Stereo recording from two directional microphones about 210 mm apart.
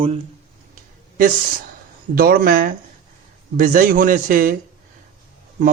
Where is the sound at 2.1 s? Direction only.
45° right (ahead or behind).